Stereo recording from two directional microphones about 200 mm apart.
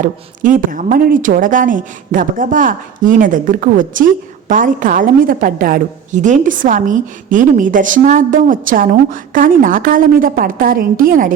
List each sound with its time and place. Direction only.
0.0 s a woman's voice: 40° right (ahead or behind)